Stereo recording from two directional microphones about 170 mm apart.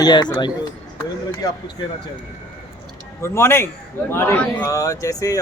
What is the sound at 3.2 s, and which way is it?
A man's voice, 15° left (ahead or behind).